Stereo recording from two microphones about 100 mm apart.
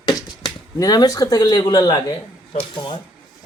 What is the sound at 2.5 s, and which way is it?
Speech, 55° left (ahead or behind).